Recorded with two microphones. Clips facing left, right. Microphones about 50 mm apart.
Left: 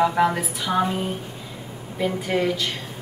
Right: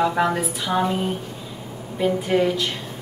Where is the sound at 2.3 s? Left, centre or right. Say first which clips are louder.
Right 3 dB; centre.